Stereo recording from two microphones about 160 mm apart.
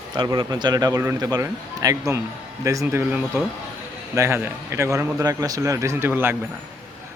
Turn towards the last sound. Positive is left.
turn(degrees=-15)  # may be behind; listen again after turning